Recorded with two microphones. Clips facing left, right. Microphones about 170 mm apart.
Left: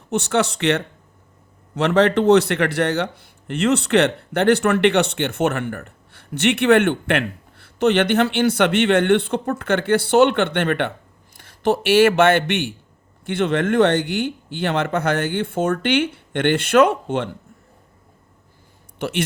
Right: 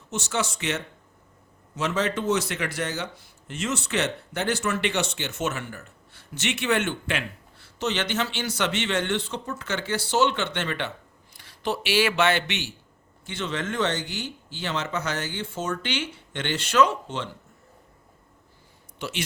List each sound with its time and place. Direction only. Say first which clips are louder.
0.1 s speech: left 9 dB; 60° left (ahead or behind)
18.9 s speech: left 9 dB; 55° left (ahead or behind)